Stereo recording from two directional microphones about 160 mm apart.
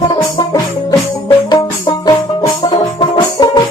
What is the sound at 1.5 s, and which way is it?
Music, 25° left (ahead or behind).